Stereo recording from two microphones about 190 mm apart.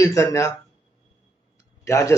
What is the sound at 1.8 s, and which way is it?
Speech, 15° left (ahead or behind).